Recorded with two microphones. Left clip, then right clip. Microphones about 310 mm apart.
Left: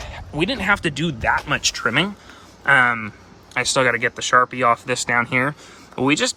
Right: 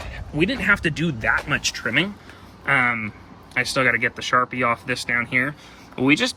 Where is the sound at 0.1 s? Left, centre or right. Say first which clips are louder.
Even; centre.